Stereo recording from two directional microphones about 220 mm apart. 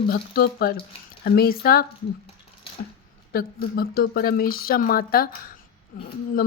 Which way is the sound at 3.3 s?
45° left (ahead or behind).